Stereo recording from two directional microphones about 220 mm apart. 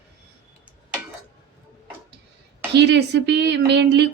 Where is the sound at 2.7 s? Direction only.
50° right (ahead or behind).